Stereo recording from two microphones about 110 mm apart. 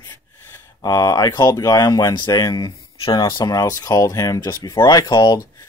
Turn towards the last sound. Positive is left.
turn(degrees=45)  # may be behind; listen again after turning